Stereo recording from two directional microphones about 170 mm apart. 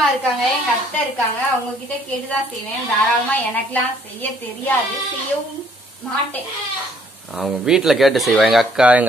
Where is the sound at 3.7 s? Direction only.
10° left (ahead or behind).